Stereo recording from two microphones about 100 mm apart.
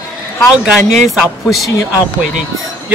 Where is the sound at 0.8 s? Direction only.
Centre (ahead or behind).